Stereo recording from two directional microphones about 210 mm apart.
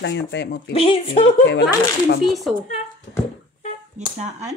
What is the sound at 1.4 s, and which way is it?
Speech, 55° left (ahead or behind).